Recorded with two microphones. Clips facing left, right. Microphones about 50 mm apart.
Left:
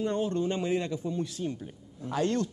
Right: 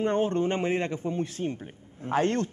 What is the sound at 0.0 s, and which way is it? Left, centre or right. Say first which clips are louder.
A man's voice: right 4 dB; right.